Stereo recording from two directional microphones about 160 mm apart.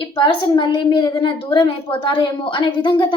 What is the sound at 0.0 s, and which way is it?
A woman's voice, 30° left (ahead or behind).